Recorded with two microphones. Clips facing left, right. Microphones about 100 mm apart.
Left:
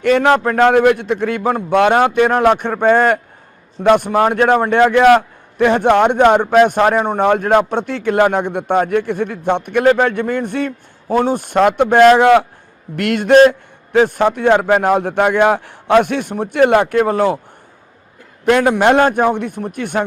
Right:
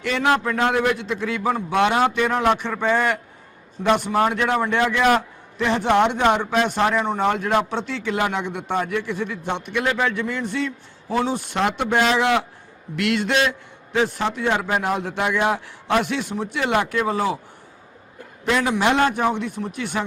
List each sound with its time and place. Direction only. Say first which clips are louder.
0.0 s a man's voice: left 8 dB; 50° left (ahead or behind)
18.4 s a man's voice: left 8 dB; 55° left (ahead or behind)